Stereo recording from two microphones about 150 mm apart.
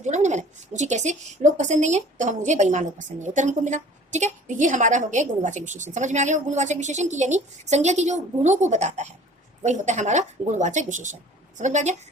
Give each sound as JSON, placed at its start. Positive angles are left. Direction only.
{"t": 0.0, "sound": "a woman's voice", "side_deg": -50}